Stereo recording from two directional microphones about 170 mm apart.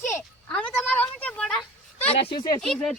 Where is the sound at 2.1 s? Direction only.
35° left (ahead or behind).